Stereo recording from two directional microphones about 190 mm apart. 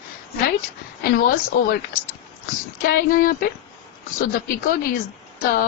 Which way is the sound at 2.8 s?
50° left (ahead or behind).